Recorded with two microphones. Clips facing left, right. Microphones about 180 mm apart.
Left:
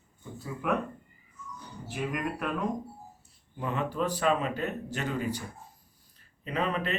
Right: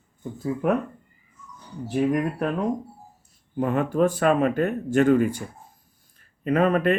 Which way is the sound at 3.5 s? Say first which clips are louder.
Right 9 dB; 50° right (ahead or behind).